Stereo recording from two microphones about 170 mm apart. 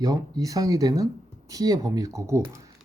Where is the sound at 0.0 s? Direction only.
20° right (ahead or behind).